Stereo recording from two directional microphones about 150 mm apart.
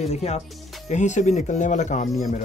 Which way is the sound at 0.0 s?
45° left (ahead or behind).